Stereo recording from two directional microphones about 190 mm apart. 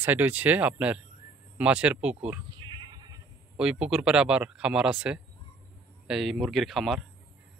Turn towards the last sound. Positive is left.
turn(degrees=0)  # may be behind; listen again after turning